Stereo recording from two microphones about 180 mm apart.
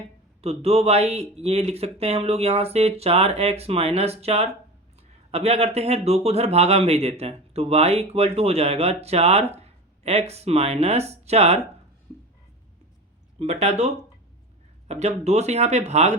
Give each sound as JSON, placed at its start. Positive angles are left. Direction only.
{"t": 0.4, "sound": "speech", "side_deg": -35}
{"t": 13.4, "sound": "speech", "side_deg": -40}